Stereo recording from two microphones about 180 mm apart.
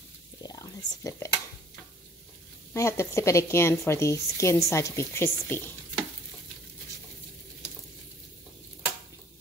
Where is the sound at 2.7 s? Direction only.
15° left (ahead or behind).